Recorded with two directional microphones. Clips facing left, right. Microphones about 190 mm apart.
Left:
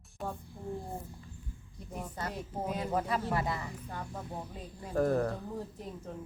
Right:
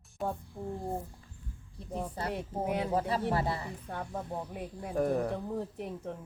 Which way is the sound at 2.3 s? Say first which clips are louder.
Right 5 dB; 65° right (ahead or behind).